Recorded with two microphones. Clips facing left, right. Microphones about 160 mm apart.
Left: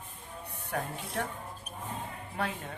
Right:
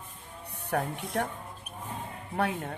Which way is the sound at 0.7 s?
60° right (ahead or behind).